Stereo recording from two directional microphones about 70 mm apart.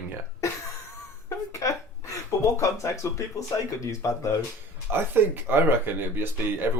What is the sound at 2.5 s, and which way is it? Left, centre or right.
Speech, left.